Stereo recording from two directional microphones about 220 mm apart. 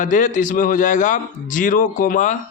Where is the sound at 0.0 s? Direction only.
35° left (ahead or behind).